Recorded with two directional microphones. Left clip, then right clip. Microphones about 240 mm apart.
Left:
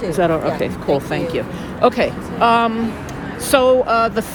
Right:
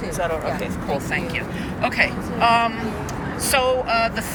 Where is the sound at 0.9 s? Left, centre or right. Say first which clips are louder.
Left 5 dB; left.